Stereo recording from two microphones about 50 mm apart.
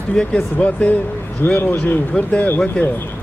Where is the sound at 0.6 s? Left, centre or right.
Left.